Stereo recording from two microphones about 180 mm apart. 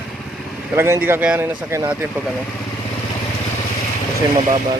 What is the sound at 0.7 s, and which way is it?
Speech, 15° right (ahead or behind).